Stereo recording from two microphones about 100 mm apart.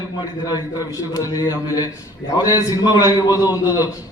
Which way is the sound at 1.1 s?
35° left (ahead or behind).